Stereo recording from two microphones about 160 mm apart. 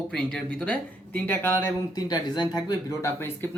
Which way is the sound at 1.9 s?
25° left (ahead or behind).